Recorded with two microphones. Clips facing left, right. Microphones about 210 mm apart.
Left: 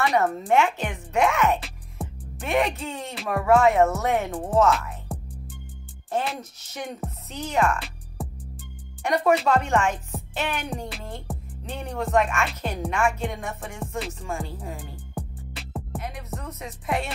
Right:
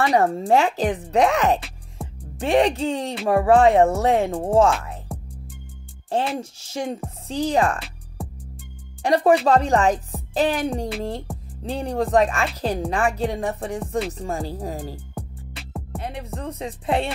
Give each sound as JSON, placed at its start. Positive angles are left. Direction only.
{"t": 0.0, "sound": "speech", "side_deg": -35}
{"t": 2.0, "sound": "music", "side_deg": 0}
{"t": 2.3, "sound": "speech", "side_deg": -30}
{"t": 5.1, "sound": "music", "side_deg": 0}
{"t": 6.3, "sound": "speech", "side_deg": -30}
{"t": 8.2, "sound": "music", "side_deg": 0}
{"t": 9.0, "sound": "speech", "side_deg": -30}
{"t": 11.3, "sound": "music", "side_deg": 0}
{"t": 11.6, "sound": "speech", "side_deg": -30}
{"t": 15.1, "sound": "music", "side_deg": 0}
{"t": 16.0, "sound": "music", "side_deg": -30}
{"t": 16.3, "sound": "speech", "side_deg": -30}